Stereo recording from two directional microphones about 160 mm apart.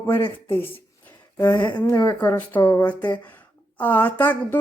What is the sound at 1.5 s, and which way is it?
Speech, 25° left (ahead or behind).